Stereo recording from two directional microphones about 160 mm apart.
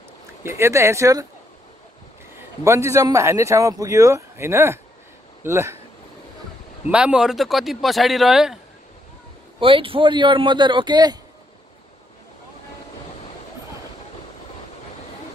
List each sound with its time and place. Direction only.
0.4 s speech: 15° right (ahead or behind)
2.6 s speech: 15° right (ahead or behind)
6.9 s speech: 5° right (ahead or behind)
9.6 s speech: 35° right (ahead or behind)